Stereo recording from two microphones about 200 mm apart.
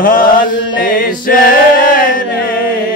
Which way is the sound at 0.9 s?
45° left (ahead or behind).